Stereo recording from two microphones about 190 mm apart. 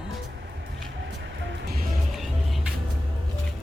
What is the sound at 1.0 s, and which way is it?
Music, 65° right (ahead or behind).